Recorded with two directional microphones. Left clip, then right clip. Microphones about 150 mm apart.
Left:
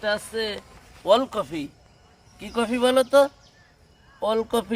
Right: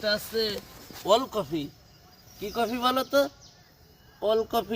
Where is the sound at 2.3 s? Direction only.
40° left (ahead or behind).